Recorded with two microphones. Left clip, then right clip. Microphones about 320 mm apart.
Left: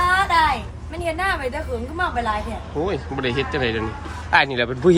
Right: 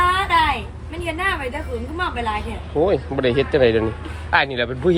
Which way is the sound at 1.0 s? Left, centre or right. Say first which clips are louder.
Even; centre.